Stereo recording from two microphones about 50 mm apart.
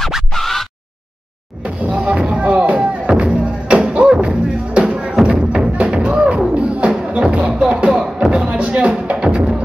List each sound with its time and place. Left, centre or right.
0.3 s scratch: centre
1.6 s music: right